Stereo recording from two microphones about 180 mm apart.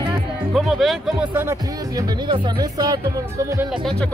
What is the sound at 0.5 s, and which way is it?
Speech, centre (ahead or behind).